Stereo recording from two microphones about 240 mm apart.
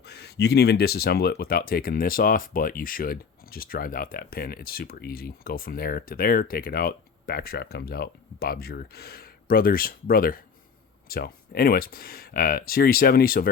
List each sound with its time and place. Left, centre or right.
0.0 s speech: left